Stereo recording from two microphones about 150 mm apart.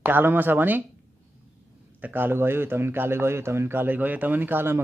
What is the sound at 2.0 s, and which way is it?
Speech, 15° right (ahead or behind).